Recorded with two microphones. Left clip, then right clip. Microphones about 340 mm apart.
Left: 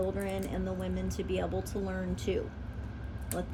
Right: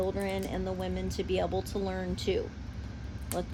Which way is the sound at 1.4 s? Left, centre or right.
Right.